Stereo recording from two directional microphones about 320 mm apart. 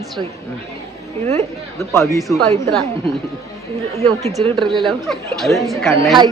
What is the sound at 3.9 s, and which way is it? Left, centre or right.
Speech, centre.